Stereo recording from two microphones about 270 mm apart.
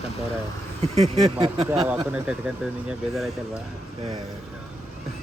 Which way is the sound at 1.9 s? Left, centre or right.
Centre.